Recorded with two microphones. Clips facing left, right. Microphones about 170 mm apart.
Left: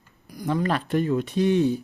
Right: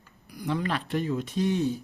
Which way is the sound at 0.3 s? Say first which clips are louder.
Left 4 dB; 45° left (ahead or behind).